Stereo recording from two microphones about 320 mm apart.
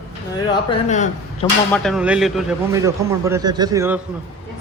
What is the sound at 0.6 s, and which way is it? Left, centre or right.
Speech, centre.